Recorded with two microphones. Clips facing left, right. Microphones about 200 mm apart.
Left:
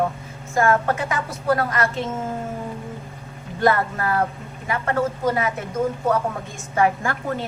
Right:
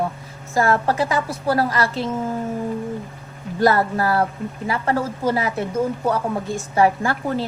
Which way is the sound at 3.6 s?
35° right (ahead or behind).